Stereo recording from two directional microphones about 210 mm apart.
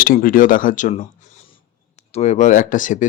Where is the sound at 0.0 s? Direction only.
40° left (ahead or behind).